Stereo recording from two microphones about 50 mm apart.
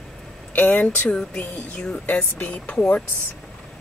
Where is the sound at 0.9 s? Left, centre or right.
Left.